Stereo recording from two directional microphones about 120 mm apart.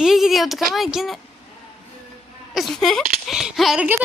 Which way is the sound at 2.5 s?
Centre (ahead or behind).